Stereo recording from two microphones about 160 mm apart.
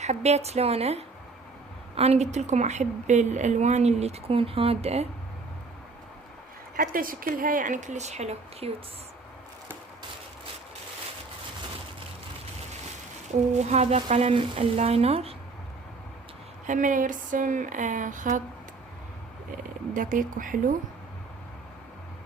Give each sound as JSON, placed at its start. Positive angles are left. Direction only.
{"t": 0.0, "sound": "a woman's voice", "side_deg": -45}
{"t": 6.7, "sound": "speech", "side_deg": -60}
{"t": 13.5, "sound": "speech", "side_deg": -45}
{"t": 16.6, "sound": "a woman's voice", "side_deg": -55}
{"t": 19.9, "sound": "speech", "side_deg": -55}